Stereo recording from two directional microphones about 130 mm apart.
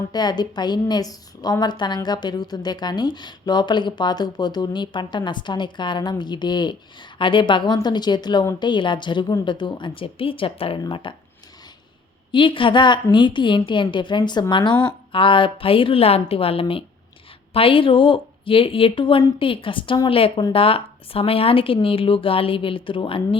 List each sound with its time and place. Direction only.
0.1 s a woman's voice: 30° left (ahead or behind)
12.3 s a woman's voice: 40° left (ahead or behind)